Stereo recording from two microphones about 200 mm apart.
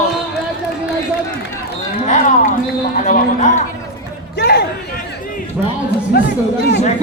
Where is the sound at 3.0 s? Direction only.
35° left (ahead or behind).